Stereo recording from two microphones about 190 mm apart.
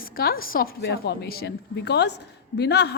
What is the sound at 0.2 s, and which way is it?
A woman's voice, 50° left (ahead or behind).